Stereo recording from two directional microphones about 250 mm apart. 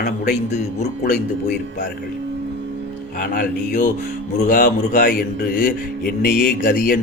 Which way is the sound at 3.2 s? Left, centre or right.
Left.